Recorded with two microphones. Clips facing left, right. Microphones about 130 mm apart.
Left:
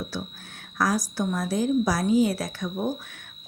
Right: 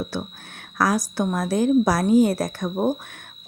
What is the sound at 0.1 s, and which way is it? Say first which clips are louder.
Whispering: right 4 dB; 60° right (ahead or behind).